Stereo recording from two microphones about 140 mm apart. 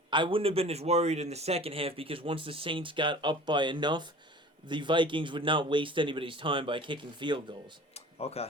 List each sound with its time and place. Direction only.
0.1 s a man's voice: 35° right (ahead or behind)
7.9 s tick-tock: 45° left (ahead or behind)